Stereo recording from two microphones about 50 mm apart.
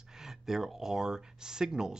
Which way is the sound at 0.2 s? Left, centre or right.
Centre.